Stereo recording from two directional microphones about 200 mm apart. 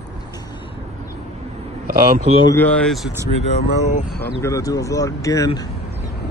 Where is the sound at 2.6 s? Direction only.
5° left (ahead or behind).